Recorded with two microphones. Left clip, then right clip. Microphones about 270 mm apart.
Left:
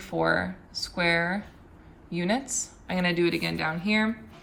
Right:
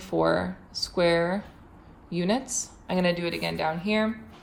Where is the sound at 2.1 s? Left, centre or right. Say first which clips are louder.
Right 1 dB; centre.